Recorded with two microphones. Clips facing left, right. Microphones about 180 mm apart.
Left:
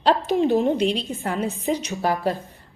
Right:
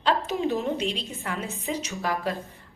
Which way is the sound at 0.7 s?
65° left (ahead or behind).